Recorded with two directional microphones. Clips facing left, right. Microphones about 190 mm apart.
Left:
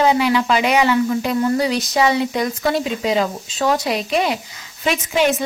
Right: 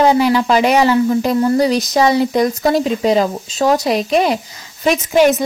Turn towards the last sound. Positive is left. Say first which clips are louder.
# right 6 dB
turn(degrees=-40)  # may be behind; listen again after turning